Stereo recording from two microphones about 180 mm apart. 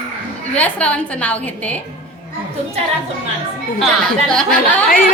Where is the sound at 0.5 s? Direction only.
10° left (ahead or behind).